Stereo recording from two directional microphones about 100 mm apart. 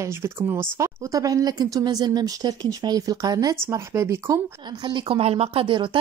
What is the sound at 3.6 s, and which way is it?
Speech, 25° right (ahead or behind).